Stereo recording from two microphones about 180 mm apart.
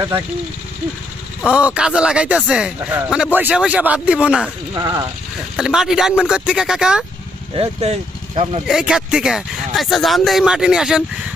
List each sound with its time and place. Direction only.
1.5 s speech: 5° right (ahead or behind)
4.7 s speech: 20° right (ahead or behind)
5.5 s speech: 5° right (ahead or behind)
7.5 s speech: 35° right (ahead or behind)
8.6 s speech: 5° right (ahead or behind)